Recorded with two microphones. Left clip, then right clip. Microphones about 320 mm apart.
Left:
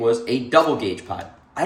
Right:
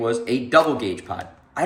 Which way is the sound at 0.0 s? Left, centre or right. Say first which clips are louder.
Left 3 dB; centre.